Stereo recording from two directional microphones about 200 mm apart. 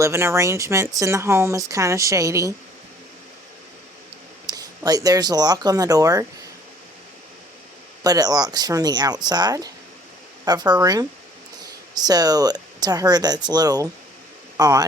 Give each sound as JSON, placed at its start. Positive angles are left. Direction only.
{"t": 0.0, "sound": "speech", "side_deg": -15}
{"t": 4.4, "sound": "speech", "side_deg": -20}
{"t": 8.0, "sound": "speech", "side_deg": -20}